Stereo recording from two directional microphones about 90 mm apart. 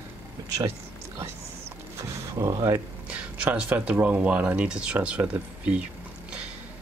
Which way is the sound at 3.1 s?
15° right (ahead or behind).